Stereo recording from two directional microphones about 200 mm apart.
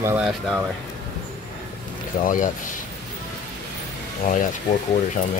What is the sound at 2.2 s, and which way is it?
Speech, 40° left (ahead or behind).